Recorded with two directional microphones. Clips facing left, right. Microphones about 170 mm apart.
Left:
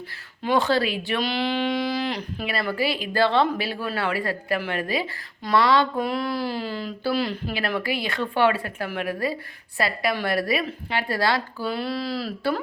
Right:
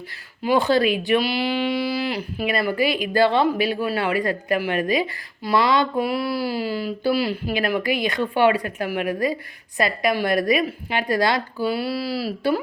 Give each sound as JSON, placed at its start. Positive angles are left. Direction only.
{"t": 0.4, "sound": "speech", "side_deg": -10}